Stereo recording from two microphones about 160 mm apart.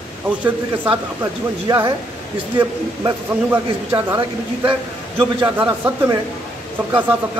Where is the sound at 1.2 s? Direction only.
15° right (ahead or behind).